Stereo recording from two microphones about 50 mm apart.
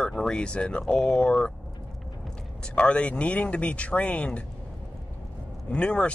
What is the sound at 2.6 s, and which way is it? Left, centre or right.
Speech, centre.